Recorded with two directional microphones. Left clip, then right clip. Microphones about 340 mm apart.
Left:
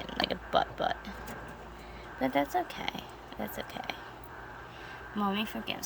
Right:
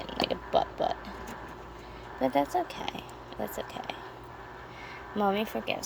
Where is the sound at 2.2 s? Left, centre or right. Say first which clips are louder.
Right 2 dB; centre.